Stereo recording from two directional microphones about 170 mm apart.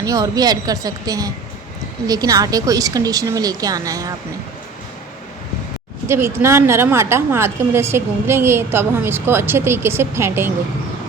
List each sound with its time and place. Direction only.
0.0 s a woman's voice: 20° right (ahead or behind)
6.1 s a woman's voice: 15° right (ahead or behind)